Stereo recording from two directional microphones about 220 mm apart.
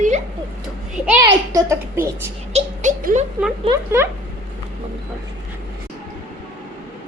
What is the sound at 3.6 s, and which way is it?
Speech, 15° right (ahead or behind).